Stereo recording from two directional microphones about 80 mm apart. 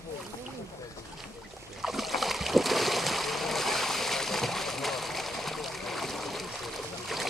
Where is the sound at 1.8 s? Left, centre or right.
Centre.